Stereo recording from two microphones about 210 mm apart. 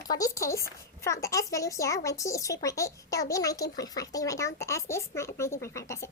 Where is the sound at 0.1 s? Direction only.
15° left (ahead or behind).